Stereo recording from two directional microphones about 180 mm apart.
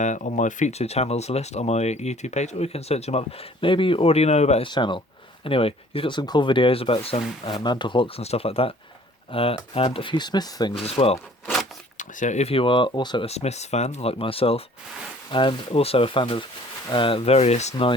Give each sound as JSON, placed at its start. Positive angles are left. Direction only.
{"t": 0.0, "sound": "speech", "side_deg": 40}
{"t": 4.7, "sound": "speech", "side_deg": 25}
{"t": 10.8, "sound": "speech", "side_deg": 35}